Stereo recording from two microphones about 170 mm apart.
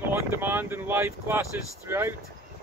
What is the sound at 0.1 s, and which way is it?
Speech, 10° right (ahead or behind).